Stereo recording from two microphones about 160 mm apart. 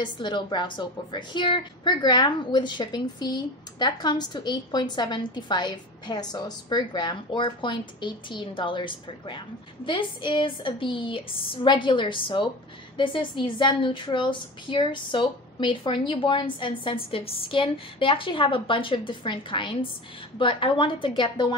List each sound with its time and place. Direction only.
0.0 s a woman's voice: 30° left (ahead or behind)